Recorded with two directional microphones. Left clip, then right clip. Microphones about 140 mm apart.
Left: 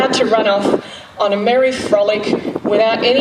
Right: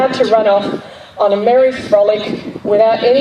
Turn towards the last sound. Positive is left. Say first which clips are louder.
# right 3 dB
turn(degrees=40)  # may be behind; listen again after turning